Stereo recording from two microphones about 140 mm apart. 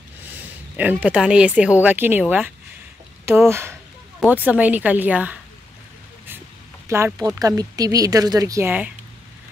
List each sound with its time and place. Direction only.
0.7 s speech: 10° right (ahead or behind)
7.2 s speech: 25° right (ahead or behind)